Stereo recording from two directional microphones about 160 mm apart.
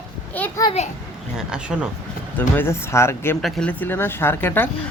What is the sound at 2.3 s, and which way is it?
Speech, 15° left (ahead or behind).